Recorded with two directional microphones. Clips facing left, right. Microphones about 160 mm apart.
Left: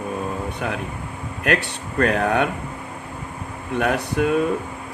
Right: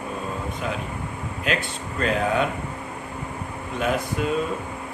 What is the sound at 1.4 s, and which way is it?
Speech, 65° left (ahead or behind).